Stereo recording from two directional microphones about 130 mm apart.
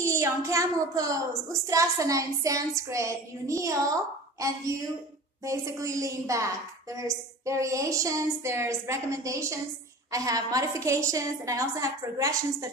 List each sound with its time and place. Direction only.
0.0 s a woman's voice: 25° right (ahead or behind)